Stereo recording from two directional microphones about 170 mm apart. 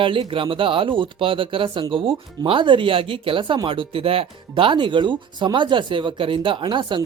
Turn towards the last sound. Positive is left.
turn(degrees=-30)  # may be behind; listen again after turning